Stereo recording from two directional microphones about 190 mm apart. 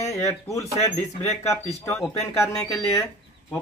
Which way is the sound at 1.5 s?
10° left (ahead or behind).